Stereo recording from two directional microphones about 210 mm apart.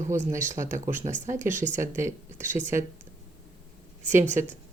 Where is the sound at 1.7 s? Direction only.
15° right (ahead or behind).